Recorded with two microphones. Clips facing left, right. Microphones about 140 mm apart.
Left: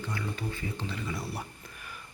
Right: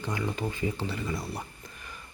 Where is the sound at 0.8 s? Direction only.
Centre (ahead or behind).